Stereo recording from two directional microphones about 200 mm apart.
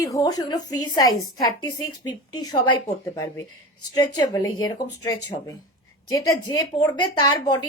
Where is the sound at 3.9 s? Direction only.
20° left (ahead or behind).